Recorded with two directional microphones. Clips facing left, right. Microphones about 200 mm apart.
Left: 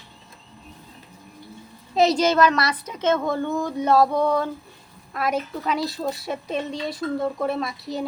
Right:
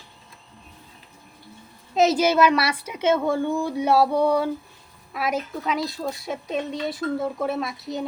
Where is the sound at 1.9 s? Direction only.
Centre (ahead or behind).